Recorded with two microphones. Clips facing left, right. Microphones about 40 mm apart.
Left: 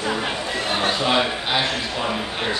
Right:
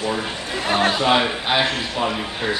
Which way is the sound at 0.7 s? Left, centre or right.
Right.